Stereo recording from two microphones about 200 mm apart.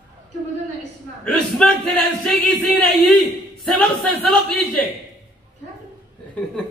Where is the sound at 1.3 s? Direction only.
5° left (ahead or behind).